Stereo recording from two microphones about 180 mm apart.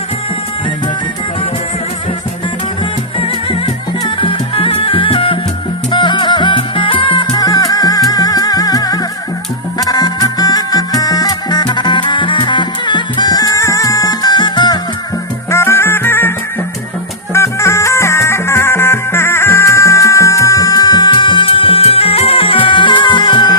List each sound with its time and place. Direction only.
4.0 s music: 30° left (ahead or behind)
15.4 s music: 15° left (ahead or behind)
17.3 s music: 15° left (ahead or behind)